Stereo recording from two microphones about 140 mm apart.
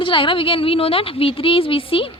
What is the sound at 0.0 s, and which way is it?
A woman's voice, 40° left (ahead or behind).